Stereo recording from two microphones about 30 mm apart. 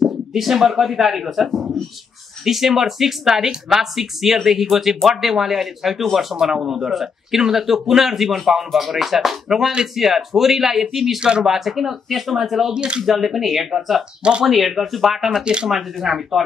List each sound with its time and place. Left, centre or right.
0.3 s speech: centre
1.5 s speech: centre
2.4 s speech: centre
11.1 s speech: right
11.4 s speech: centre
12.7 s speech: right
13.0 s speech: centre
15.1 s speech: centre
15.4 s speech: right
15.7 s speech: centre